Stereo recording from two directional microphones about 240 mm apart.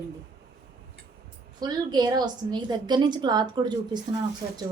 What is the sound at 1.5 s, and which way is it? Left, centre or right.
A woman's voice, centre.